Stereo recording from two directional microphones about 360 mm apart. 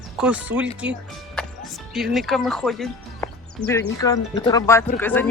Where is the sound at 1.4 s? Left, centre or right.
Centre.